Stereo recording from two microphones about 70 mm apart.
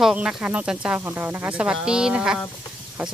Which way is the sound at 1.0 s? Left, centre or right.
Right.